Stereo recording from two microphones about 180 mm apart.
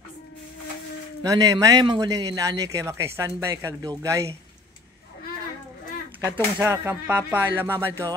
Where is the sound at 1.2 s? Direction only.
20° right (ahead or behind).